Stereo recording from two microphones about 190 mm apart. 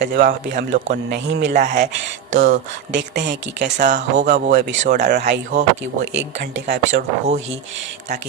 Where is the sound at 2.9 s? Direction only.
65° right (ahead or behind).